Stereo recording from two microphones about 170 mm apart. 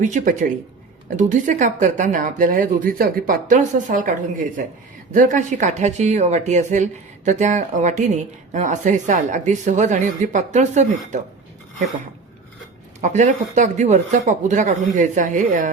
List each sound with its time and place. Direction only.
0.0 s a woman's voice: 50° right (ahead or behind)
13.0 s a woman's voice: 45° right (ahead or behind)